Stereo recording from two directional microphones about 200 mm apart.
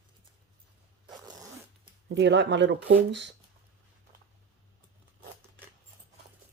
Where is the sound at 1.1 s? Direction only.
20° right (ahead or behind).